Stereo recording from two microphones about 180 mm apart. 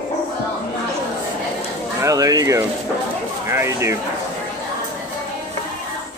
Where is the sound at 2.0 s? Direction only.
20° right (ahead or behind).